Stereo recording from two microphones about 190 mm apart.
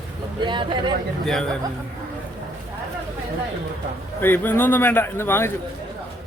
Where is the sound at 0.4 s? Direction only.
25° right (ahead or behind).